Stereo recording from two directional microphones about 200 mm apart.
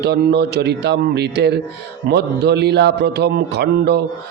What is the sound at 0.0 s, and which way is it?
A man's voice, 55° right (ahead or behind).